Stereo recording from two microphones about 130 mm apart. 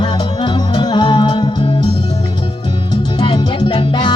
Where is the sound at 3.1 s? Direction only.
40° left (ahead or behind).